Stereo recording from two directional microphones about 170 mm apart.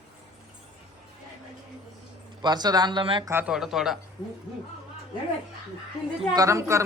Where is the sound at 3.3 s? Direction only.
15° right (ahead or behind).